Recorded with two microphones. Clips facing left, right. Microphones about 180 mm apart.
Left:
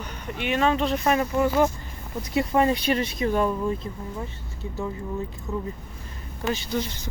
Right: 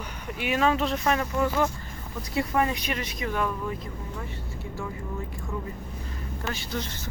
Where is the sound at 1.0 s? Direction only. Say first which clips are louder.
Left 4 dB; 15° left (ahead or behind); by 3.8 s 30° left (ahead or behind).